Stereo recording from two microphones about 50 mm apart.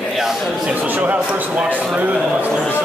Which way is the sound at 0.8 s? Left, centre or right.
Right.